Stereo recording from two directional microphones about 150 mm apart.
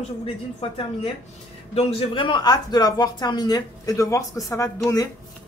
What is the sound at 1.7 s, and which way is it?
Speech, 40° left (ahead or behind).